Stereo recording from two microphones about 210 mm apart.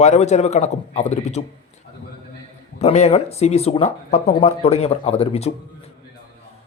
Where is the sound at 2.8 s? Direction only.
30° left (ahead or behind).